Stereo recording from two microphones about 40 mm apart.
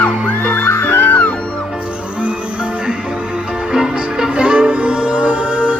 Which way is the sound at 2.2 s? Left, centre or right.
Right.